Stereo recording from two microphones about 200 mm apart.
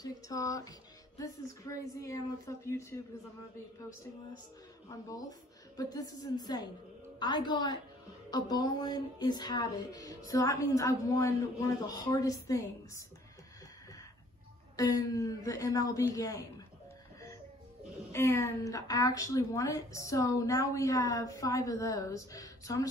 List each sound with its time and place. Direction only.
0.0 s speech: 15° left (ahead or behind)
5.8 s a woman's voice: 20° left (ahead or behind)
14.8 s speech: 15° left (ahead or behind)
18.1 s speech: 10° left (ahead or behind)